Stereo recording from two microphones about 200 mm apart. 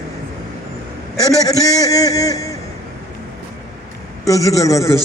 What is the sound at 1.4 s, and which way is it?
A man's voice, 15° left (ahead or behind).